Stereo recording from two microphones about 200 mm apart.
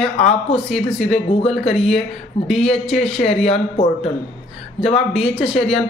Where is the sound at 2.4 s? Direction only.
25° left (ahead or behind).